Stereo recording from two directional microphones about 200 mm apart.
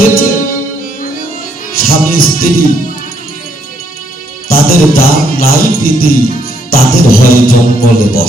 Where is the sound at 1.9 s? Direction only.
45° left (ahead or behind).